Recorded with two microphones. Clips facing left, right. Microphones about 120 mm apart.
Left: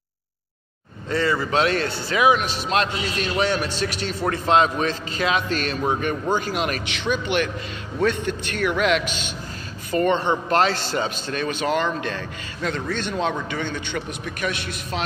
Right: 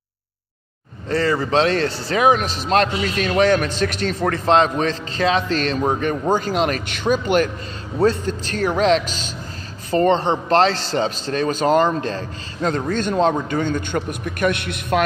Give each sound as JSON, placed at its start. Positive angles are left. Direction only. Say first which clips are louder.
{"t": 1.0, "sound": "speech", "louder": "right 3 dB", "side_deg": -35}